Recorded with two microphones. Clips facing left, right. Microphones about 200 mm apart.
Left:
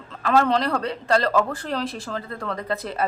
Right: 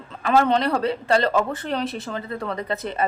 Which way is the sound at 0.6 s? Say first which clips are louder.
Right 3 dB; 25° right (ahead or behind).